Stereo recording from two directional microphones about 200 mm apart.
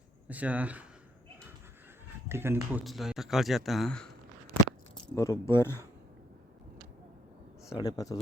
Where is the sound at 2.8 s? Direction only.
Centre (ahead or behind).